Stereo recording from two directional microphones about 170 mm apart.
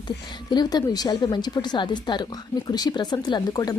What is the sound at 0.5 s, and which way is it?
Speech, 25° left (ahead or behind).